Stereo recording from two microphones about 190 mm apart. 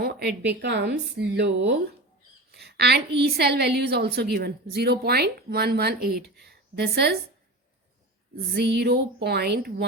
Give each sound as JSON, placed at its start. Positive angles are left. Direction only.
{"t": 0.0, "sound": "a woman's voice", "side_deg": -60}
{"t": 2.5, "sound": "a sound", "side_deg": -60}
{"t": 3.2, "sound": "a woman's voice", "side_deg": -60}
{"t": 8.5, "sound": "a woman's voice", "side_deg": -60}